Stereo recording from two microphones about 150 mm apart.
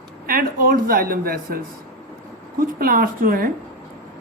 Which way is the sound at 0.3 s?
70° right (ahead or behind).